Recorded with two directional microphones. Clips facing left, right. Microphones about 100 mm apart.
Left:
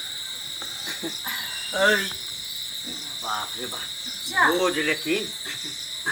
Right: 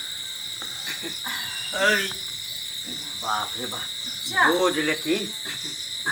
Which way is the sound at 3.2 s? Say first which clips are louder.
Right 3 dB; 15° right (ahead or behind).